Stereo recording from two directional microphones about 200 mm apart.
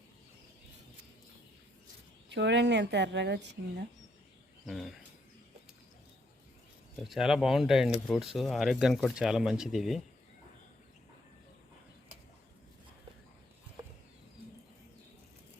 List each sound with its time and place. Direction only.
2.3 s a woman's voice: 60° right (ahead or behind)
4.6 s speech: centre (ahead or behind)
7.0 s speech: centre (ahead or behind)